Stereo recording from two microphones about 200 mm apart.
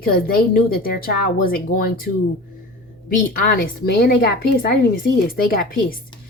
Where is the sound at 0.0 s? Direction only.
45° left (ahead or behind).